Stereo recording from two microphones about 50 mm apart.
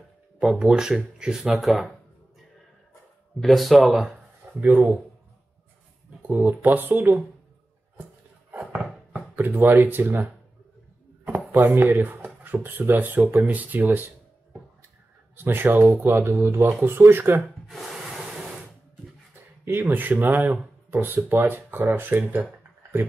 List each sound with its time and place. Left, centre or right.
0.4 s speech: centre
3.3 s speech: centre
4.6 s speech: right
6.2 s speech: right
8.0 s a sound: right
9.7 s speech: right
11.5 s speech: right
15.3 s speech: right
17.6 s wood: centre
19.6 s speech: right